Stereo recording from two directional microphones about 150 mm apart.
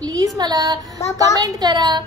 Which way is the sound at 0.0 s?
25° right (ahead or behind).